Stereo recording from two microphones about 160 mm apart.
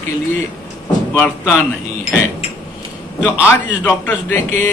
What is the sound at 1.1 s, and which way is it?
Speech, 15° left (ahead or behind).